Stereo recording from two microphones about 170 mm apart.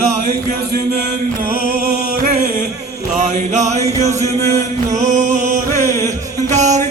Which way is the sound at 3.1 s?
45° right (ahead or behind).